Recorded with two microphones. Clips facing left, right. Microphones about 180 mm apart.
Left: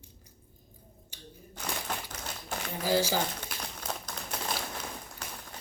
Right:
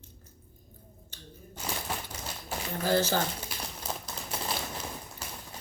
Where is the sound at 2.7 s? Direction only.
10° left (ahead or behind).